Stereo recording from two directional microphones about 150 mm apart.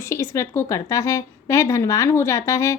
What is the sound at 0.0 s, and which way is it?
A woman's voice, 15° left (ahead or behind).